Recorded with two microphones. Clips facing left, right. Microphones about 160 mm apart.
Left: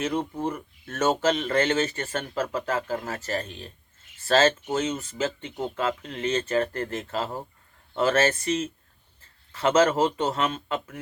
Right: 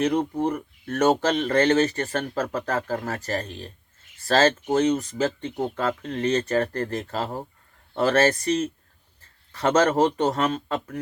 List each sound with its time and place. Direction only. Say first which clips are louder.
0.0 s speech: right 5 dB; 35° right (ahead or behind)